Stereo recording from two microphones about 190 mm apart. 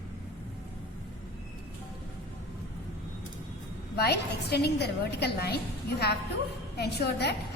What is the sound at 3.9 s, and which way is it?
A woman's voice, 60° left (ahead or behind).